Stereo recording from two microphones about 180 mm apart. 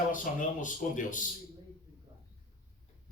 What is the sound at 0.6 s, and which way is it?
Speech, 45° left (ahead or behind).